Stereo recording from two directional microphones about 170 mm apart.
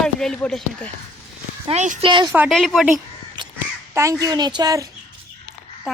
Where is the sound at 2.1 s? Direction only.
30° right (ahead or behind).